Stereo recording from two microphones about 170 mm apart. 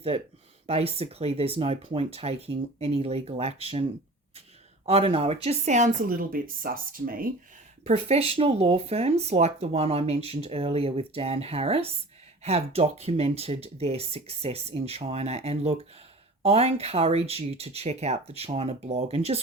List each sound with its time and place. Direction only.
0.7 s speech: 35° right (ahead or behind)
4.9 s speech: 35° right (ahead or behind); by 7.3 s 55° right (ahead or behind)
7.9 s speech: 40° right (ahead or behind)